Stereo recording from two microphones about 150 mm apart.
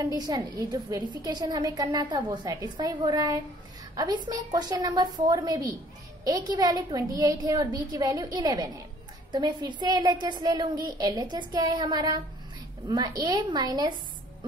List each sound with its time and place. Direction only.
0.0 s a woman's voice: 25° right (ahead or behind)